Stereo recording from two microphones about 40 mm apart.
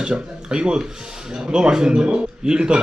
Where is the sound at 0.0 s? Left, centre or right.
Centre.